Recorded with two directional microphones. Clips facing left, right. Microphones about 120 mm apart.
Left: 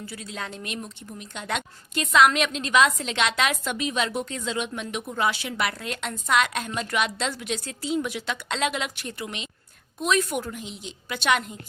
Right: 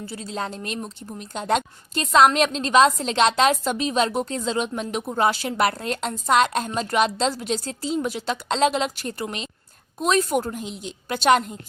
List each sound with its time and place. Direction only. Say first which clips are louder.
0.0 s a woman's voice: right 5 dB; 30° right (ahead or behind)
10.6 s a woman's voice: right 5 dB; centre (ahead or behind)
11.1 s a woman's voice: right 6 dB; 40° right (ahead or behind)